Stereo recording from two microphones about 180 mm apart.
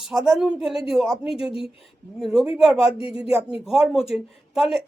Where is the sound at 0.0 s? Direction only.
5° right (ahead or behind).